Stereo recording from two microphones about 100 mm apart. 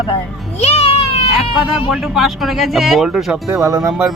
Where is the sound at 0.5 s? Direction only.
90° left.